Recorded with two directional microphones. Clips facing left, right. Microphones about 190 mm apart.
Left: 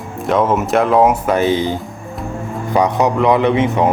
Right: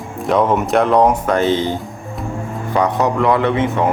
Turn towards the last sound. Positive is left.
turn(degrees=20)  # may be behind; listen again after turning